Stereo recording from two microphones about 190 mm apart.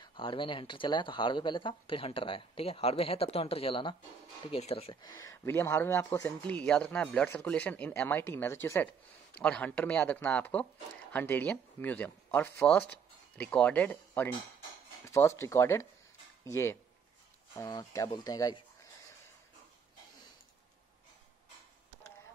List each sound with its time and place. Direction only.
0.0 s speech: 25° left (ahead or behind)
5.0 s speech: 15° left (ahead or behind)